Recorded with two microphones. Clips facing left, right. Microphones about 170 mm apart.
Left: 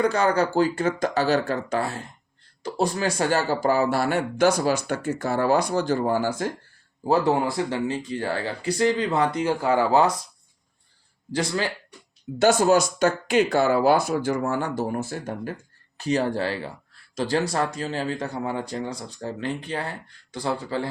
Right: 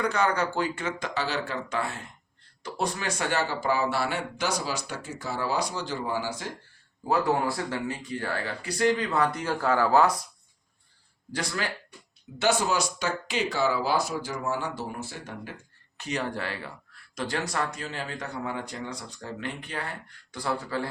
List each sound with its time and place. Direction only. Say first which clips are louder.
0.0 s speech: left 5 dB; 35° left (ahead or behind); by 6.5 s 50° left (ahead or behind)
7.1 s speech: left 4 dB; 25° left (ahead or behind)
12.4 s speech: left 7 dB; 45° left (ahead or behind)
16.0 s speech: left 8 dB; 35° left (ahead or behind)